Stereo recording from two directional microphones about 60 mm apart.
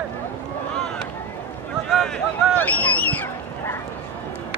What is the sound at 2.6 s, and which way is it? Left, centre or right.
Hubbub, left.